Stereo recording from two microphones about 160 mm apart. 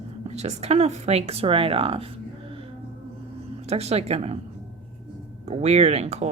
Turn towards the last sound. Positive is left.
turn(degrees=-40)  # may be behind; listen again after turning